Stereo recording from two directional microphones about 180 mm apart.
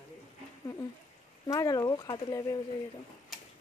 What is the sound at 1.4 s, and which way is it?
Speech, 20° left (ahead or behind).